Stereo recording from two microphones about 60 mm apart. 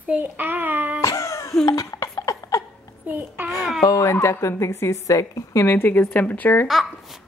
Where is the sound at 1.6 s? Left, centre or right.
Left.